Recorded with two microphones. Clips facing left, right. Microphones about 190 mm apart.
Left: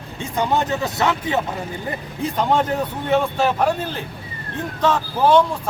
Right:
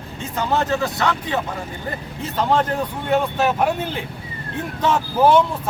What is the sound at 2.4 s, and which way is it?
Speech, 10° left (ahead or behind).